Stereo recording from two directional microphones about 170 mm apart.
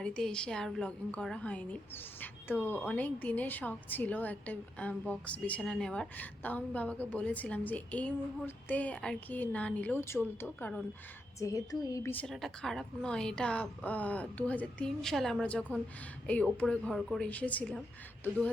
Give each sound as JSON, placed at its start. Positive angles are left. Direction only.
{"t": 0.0, "sound": "a woman's voice", "side_deg": 5}
{"t": 11.3, "sound": "a woman's voice", "side_deg": 20}
{"t": 12.2, "sound": "a woman's voice", "side_deg": 0}